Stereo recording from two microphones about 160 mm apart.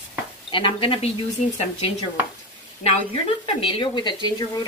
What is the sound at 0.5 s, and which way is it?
Speech, 35° left (ahead or behind).